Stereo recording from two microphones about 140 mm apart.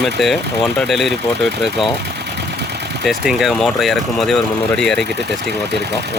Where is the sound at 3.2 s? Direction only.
5° right (ahead or behind).